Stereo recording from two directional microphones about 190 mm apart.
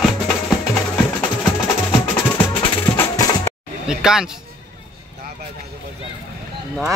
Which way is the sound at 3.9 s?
5° right (ahead or behind).